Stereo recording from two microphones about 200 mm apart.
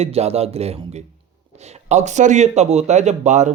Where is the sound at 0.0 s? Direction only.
30° right (ahead or behind).